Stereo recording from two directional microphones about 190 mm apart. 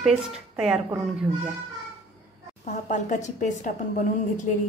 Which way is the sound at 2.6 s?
40° left (ahead or behind).